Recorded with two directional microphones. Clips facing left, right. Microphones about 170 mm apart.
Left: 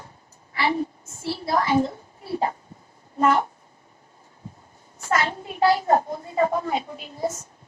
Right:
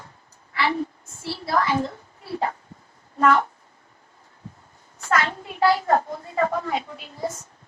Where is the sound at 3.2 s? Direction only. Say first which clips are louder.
Right 1 dB; 15° left (ahead or behind).